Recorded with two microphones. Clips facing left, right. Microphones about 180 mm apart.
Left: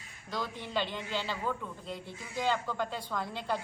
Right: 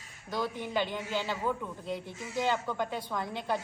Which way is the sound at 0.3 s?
15° right (ahead or behind).